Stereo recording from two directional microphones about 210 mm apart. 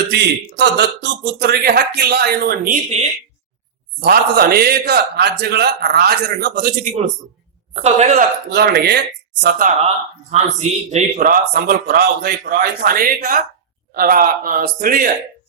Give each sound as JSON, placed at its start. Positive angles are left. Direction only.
{"t": 0.1, "sound": "a man's voice", "side_deg": -55}
{"t": 4.0, "sound": "a man's voice", "side_deg": -45}
{"t": 7.8, "sound": "speech", "side_deg": -30}
{"t": 8.4, "sound": "a man's voice", "side_deg": -50}
{"t": 10.3, "sound": "a man's voice", "side_deg": -30}